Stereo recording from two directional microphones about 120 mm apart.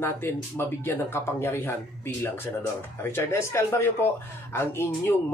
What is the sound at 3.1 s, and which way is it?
Speech, 20° left (ahead or behind).